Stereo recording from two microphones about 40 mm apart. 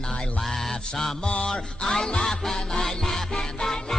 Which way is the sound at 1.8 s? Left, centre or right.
Centre.